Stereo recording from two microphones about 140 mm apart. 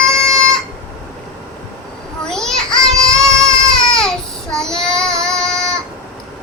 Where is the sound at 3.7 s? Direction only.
5° left (ahead or behind).